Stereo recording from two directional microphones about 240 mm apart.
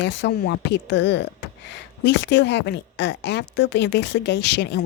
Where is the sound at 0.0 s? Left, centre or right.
Left.